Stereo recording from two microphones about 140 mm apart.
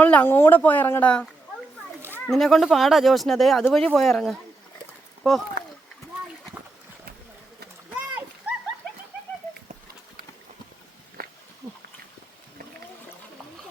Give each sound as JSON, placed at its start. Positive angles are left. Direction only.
{"t": 0.0, "sound": "speech", "side_deg": 15}
{"t": 7.9, "sound": "splash", "side_deg": -10}
{"t": 11.2, "sound": "a sound", "side_deg": -90}